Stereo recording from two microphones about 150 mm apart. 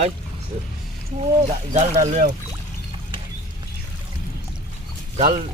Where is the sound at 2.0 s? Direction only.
55° right (ahead or behind).